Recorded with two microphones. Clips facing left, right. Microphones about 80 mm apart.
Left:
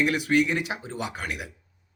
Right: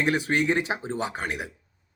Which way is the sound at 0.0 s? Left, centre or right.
Right.